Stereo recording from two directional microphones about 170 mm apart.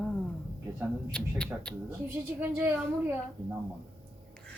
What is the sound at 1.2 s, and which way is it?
Speech, 5° left (ahead or behind).